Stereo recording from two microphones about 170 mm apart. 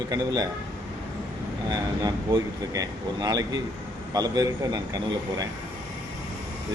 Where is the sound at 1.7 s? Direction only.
20° right (ahead or behind).